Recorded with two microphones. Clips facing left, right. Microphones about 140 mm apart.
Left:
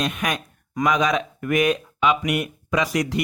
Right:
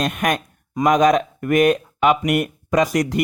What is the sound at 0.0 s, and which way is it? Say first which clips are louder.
Speech: right 4 dB; 50° right (ahead or behind).